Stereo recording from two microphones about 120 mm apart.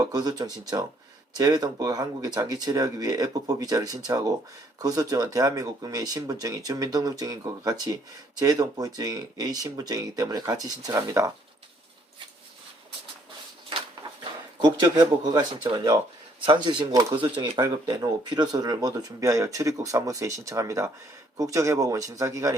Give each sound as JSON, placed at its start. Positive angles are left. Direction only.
{"t": 0.0, "sound": "speech", "side_deg": -35}
{"t": 14.6, "sound": "speech", "side_deg": -30}